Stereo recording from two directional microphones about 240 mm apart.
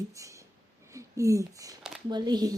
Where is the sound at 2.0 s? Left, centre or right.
Centre.